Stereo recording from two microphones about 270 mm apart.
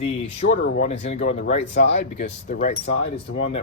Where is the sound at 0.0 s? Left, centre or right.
Left.